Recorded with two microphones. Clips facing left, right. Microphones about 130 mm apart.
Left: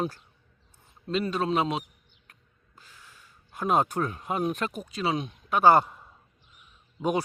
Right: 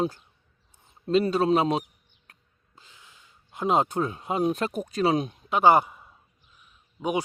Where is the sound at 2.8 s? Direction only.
20° right (ahead or behind); by 5.3 s 40° right (ahead or behind).